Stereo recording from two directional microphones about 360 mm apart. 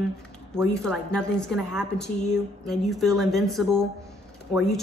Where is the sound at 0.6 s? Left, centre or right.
Centre.